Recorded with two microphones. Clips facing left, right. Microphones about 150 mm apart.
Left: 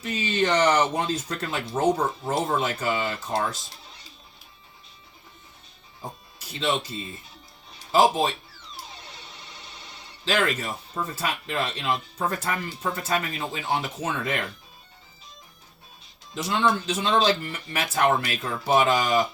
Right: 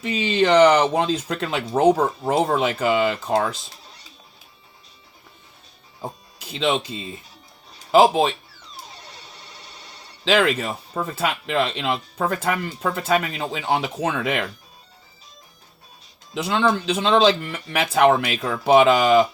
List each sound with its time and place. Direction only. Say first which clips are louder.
0.0 s speech: right 5 dB; 90° right; by 3.5 s 70° right (ahead or behind)
7.9 s speech: right 5 dB; 90° right
10.2 s speech: right 6 dB; 80° right
10.9 s speech: right 5 dB; 60° right (ahead or behind); by 11.6 s 75° right (ahead or behind)
12.5 s speech: right 5 dB; 65° right (ahead or behind); by 14.4 s 90° right
16.3 s speech: right 3 dB; 90° right